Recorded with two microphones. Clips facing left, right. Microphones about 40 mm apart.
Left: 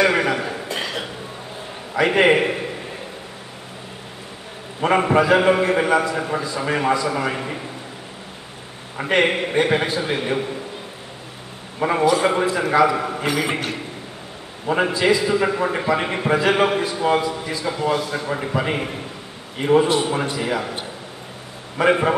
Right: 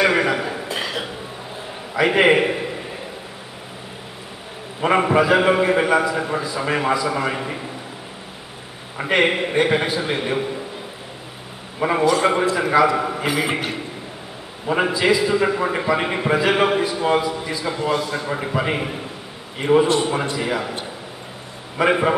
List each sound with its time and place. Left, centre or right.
0.0 s a sound: centre
2.0 s a man's voice: centre
4.8 s a man's voice: centre
8.9 s a man's voice: centre
11.8 s a man's voice: centre
21.7 s a man's voice: centre